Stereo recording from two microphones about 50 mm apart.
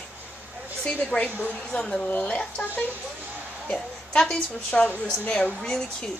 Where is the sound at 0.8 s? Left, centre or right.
Left.